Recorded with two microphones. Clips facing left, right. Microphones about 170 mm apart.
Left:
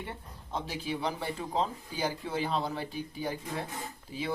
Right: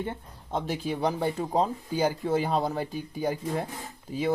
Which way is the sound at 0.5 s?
50° right (ahead or behind).